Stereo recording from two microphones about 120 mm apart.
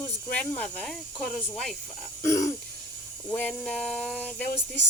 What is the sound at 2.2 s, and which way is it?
Throat clearing, 25° left (ahead or behind).